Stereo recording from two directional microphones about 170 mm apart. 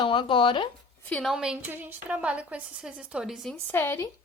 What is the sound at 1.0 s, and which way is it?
A woman's voice, 5° left (ahead or behind).